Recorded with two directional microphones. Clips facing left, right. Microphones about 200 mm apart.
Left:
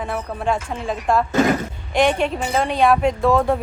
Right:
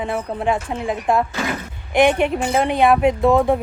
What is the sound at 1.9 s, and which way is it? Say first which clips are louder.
Speech: right 3 dB; 15° right (ahead or behind).